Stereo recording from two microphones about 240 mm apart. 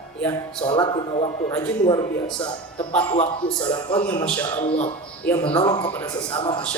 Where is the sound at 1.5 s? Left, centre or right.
Centre.